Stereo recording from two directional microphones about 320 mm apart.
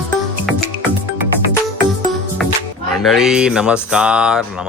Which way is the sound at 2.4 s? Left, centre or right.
Centre.